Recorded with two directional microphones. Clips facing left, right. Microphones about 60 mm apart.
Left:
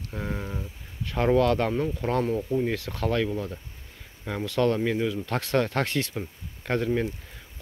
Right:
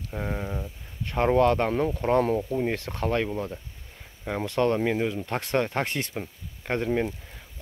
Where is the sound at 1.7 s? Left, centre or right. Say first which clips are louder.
Right 2 dB; right.